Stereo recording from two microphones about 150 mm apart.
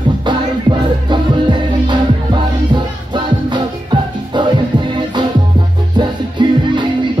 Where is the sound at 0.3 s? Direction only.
30° right (ahead or behind).